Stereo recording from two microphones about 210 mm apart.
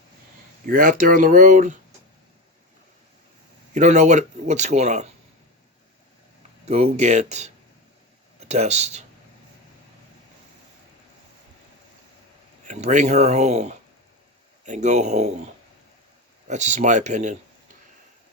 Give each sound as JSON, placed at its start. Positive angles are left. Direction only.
{"t": 0.7, "sound": "speech", "side_deg": -40}
{"t": 3.8, "sound": "speech", "side_deg": -35}
{"t": 6.9, "sound": "speech", "side_deg": -30}
{"t": 12.6, "sound": "speech", "side_deg": -35}
{"t": 16.5, "sound": "speech", "side_deg": -35}